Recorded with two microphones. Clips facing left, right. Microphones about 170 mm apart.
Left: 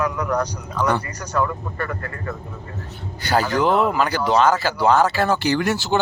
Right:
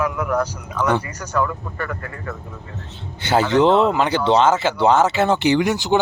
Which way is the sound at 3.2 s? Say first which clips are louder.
Right 4 dB; 25° right (ahead or behind).